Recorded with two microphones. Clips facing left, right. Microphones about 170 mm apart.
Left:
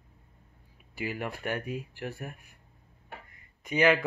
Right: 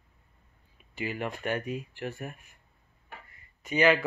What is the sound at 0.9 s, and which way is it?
Speech, 10° left (ahead or behind).